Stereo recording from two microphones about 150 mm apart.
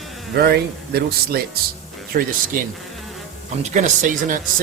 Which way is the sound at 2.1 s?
75° right (ahead or behind).